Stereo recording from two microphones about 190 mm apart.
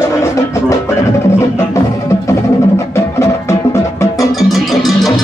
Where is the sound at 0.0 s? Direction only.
15° left (ahead or behind).